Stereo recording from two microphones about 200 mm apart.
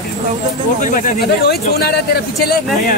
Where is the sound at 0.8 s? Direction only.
40° left (ahead or behind).